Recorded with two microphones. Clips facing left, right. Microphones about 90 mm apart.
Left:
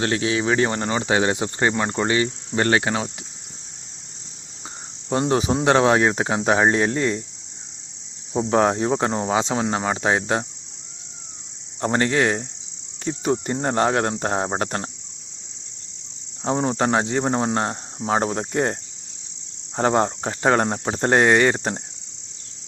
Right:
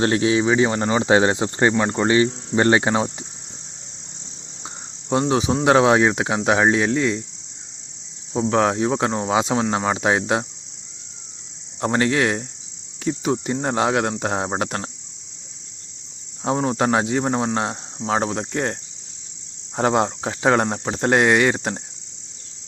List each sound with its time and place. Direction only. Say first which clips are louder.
0.0 s cricket: right 4 dB; 30° right (ahead or behind)
0.4 s speech: right 2 dB; 10° right (ahead or behind)
0.8 s cricket: right 4 dB; 20° right (ahead or behind)
5.3 s speech: right 1 dB; centre (ahead or behind)
8.3 s speech: even; 5° left (ahead or behind)
11.8 s speech: right 1 dB; centre (ahead or behind)
16.4 s speech: right 1 dB; centre (ahead or behind)